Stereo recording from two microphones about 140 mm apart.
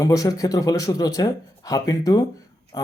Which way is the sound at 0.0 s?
25° left (ahead or behind).